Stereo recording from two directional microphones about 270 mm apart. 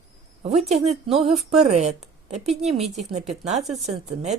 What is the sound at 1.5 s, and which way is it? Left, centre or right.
A woman's voice, right.